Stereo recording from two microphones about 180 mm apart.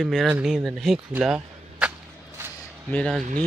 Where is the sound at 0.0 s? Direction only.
Centre (ahead or behind).